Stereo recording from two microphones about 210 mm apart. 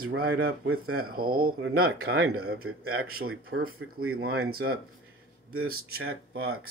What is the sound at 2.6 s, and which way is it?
Speech, 85° right.